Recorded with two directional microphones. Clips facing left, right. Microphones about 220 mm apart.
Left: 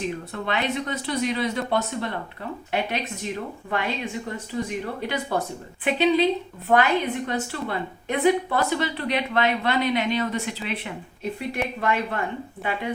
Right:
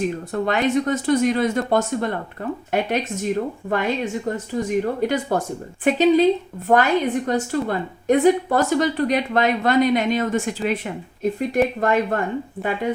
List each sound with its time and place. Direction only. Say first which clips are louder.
0.0 s speech: right 6 dB; 45° right (ahead or behind)